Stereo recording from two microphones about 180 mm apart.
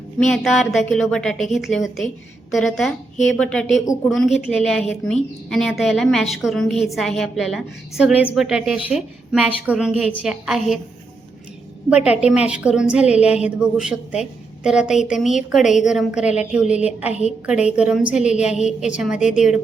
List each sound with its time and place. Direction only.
0.2 s a woman's voice: centre (ahead or behind)
12.0 s a woman's voice: 5° right (ahead or behind)
16.5 s a sound: 5° right (ahead or behind)
17.4 s a woman's voice: 5° right (ahead or behind)